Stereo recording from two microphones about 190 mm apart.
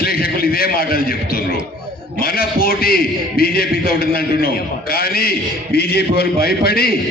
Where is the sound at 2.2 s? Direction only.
50° left (ahead or behind).